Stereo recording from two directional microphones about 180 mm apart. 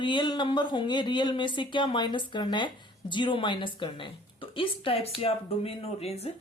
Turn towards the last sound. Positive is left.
turn(degrees=35)  # may be behind; listen again after turning